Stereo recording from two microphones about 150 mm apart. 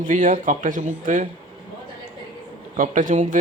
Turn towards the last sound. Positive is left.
turn(degrees=-60)  # may be behind; listen again after turning